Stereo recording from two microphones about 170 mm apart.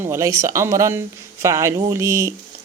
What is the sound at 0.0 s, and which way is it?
Speech, 15° right (ahead or behind).